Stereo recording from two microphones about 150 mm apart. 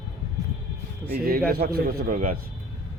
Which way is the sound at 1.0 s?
85° right.